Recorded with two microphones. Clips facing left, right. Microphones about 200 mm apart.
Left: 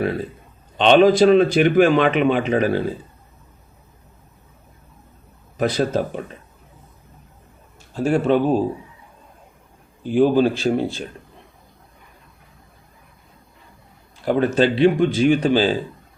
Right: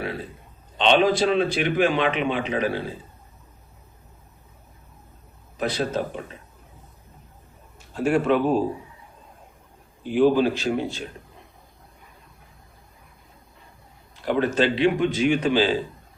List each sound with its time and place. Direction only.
0.8 s a man's voice: 45° left (ahead or behind)
5.5 s a man's voice: 45° left (ahead or behind)
7.9 s speech: 35° left (ahead or behind)
10.1 s speech: 35° left (ahead or behind)
14.3 s speech: 40° left (ahead or behind)